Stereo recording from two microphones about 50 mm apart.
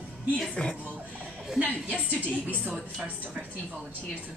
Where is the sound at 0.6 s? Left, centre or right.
Centre.